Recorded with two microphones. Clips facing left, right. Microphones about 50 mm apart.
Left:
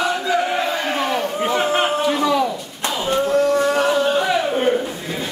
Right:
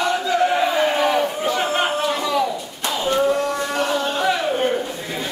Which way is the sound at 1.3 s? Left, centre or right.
Left.